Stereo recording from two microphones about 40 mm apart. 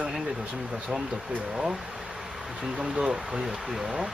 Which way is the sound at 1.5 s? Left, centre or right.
Right.